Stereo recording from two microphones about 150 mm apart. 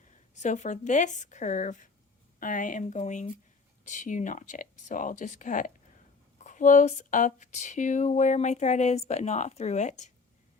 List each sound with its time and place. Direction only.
0.3 s speech: 50° left (ahead or behind)